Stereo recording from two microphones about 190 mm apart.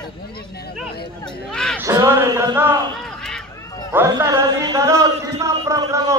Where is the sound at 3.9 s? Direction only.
15° right (ahead or behind).